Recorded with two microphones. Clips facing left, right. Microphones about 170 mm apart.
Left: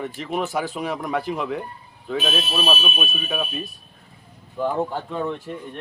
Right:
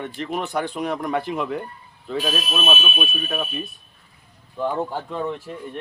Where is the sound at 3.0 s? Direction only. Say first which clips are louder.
Even; 5° left (ahead or behind).